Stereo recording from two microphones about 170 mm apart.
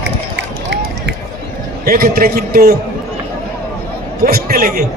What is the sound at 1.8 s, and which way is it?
Speech, 60° right (ahead or behind).